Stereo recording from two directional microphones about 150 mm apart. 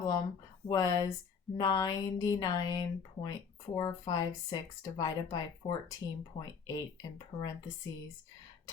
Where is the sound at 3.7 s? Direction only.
30° left (ahead or behind).